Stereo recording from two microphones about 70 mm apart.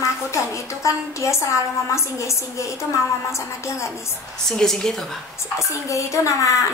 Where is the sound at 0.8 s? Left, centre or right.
Left.